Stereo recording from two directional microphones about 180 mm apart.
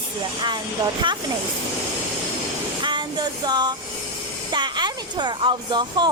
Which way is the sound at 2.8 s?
25° right (ahead or behind).